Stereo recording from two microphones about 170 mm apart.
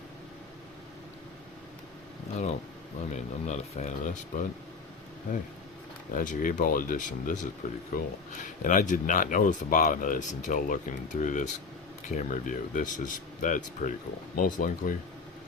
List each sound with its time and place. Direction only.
3.1 s speech: 45° left (ahead or behind)
6.1 s speech: 50° left (ahead or behind)